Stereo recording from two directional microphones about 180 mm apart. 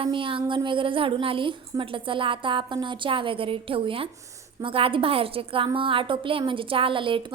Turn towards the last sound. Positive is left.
turn(degrees=-30)  # may be behind; listen again after turning